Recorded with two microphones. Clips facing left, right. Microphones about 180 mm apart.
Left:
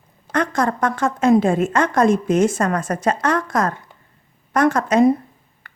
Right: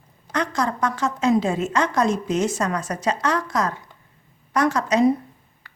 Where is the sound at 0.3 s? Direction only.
55° left (ahead or behind).